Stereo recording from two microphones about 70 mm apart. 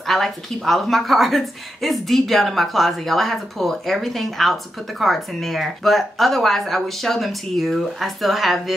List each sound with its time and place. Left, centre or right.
0.0 s a woman's voice: centre